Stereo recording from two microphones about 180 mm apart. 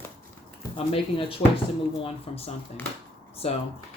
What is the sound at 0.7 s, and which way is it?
Speech, 30° left (ahead or behind).